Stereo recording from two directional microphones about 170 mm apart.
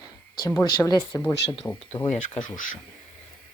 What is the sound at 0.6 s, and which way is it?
Speech, 20° left (ahead or behind).